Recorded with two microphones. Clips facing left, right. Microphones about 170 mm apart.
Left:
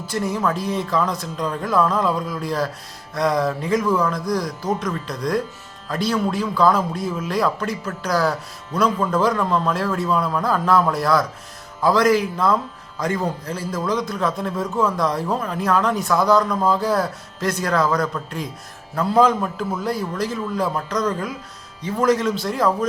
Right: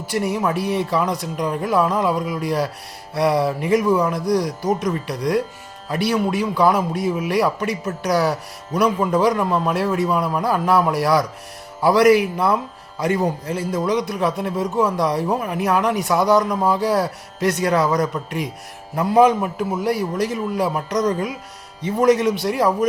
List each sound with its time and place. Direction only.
0.2 s a man's voice: 15° right (ahead or behind)
0.5 s speech: 70° right (ahead or behind)
0.8 s a man's voice: 15° right (ahead or behind)